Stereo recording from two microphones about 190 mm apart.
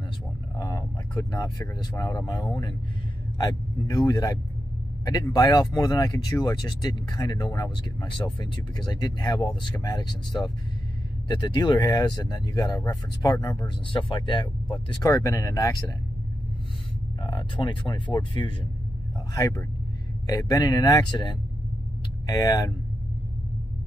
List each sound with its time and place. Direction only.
0.6 s speech: 20° left (ahead or behind)
17.2 s speech: 25° left (ahead or behind)